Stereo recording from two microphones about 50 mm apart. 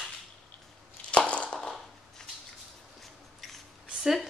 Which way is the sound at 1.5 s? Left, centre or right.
Centre.